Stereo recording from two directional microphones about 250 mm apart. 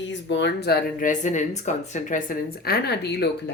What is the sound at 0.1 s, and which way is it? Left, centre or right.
A woman's voice, left.